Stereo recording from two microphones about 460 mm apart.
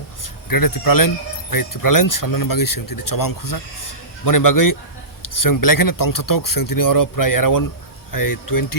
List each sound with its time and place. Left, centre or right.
0.4 s speech: left